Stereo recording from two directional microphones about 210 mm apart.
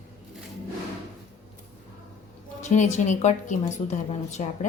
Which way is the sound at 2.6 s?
35° left (ahead or behind).